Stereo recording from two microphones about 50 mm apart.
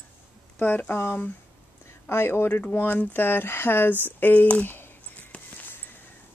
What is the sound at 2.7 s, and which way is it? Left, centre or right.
Speech, left.